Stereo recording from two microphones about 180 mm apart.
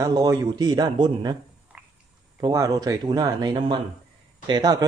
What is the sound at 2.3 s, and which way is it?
A man's voice, 20° right (ahead or behind).